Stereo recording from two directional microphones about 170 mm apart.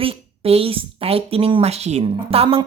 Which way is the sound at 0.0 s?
35° right (ahead or behind).